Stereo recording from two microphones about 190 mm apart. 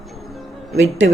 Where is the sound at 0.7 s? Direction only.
85° right.